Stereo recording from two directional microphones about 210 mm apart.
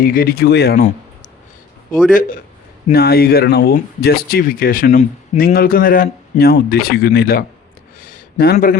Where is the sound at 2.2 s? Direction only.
40° left (ahead or behind).